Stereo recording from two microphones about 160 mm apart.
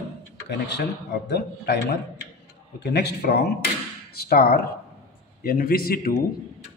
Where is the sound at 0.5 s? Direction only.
90° left; by 6.2 s 70° left (ahead or behind).